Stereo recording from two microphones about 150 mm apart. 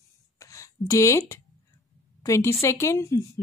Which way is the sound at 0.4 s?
20° left (ahead or behind).